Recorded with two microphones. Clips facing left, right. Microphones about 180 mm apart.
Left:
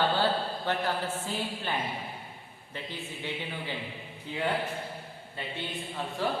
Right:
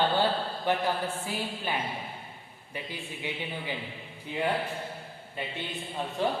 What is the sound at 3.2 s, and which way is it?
Speech, 15° right (ahead or behind).